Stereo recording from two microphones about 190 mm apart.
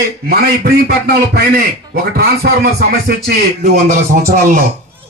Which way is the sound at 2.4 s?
55° right (ahead or behind).